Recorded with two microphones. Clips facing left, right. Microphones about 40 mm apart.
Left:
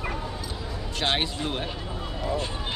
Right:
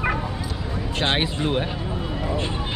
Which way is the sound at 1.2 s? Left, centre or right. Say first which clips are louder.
Right 6 dB; centre.